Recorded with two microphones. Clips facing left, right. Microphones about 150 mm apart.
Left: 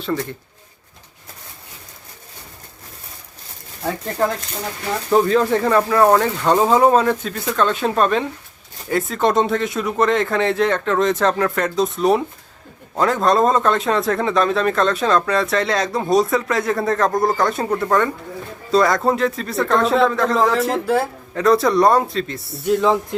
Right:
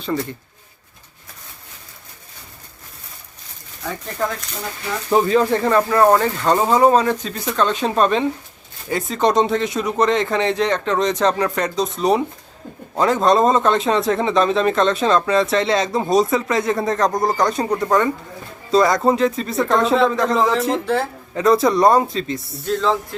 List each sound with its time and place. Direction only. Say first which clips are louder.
5.1 s a man's voice: even; 5° right (ahead or behind)
17.7 s speech: even; 15° right (ahead or behind)
18.7 s a man's voice: right 1 dB; centre (ahead or behind)
22.6 s speech: left 3 dB; 15° left (ahead or behind)